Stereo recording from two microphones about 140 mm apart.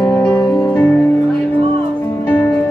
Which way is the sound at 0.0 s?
15° left (ahead or behind).